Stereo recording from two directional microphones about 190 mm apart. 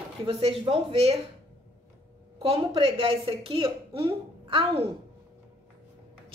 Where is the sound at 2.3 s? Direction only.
30° right (ahead or behind).